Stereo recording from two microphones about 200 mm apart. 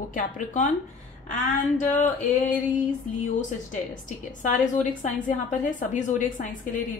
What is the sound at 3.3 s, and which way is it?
A woman's voice, 40° left (ahead or behind).